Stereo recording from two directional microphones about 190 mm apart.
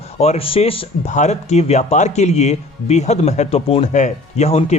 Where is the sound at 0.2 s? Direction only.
30° left (ahead or behind).